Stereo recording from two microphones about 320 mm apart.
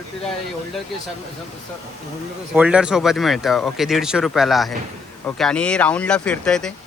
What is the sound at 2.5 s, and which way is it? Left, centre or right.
Speech, centre.